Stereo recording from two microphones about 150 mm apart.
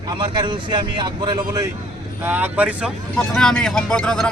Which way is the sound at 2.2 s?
10° right (ahead or behind).